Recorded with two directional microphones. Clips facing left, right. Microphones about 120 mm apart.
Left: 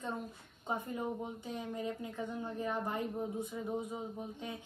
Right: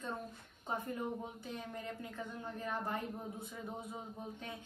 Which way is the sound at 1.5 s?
20° left (ahead or behind).